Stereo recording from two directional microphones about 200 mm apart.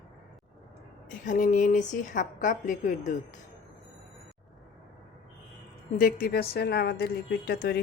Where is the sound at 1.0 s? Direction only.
40° left (ahead or behind).